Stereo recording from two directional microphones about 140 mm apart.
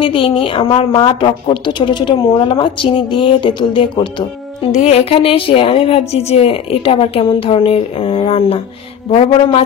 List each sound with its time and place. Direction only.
0.0 s a woman's voice: 40° left (ahead or behind)
4.8 s a woman's voice: 45° left (ahead or behind)